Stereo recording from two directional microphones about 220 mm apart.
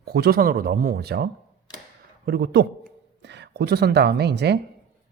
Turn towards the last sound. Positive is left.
turn(degrees=-50)  # may be behind; listen again after turning